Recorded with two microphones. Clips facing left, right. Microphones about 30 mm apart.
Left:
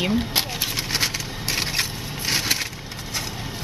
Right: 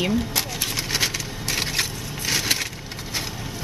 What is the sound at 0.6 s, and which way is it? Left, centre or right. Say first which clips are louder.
Scrape: even; centre.